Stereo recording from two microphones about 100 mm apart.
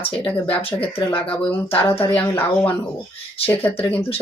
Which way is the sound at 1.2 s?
20° left (ahead or behind).